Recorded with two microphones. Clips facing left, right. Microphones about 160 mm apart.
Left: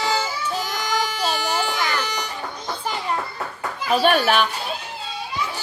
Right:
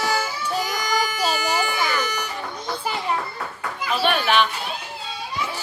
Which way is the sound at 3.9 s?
40° left (ahead or behind).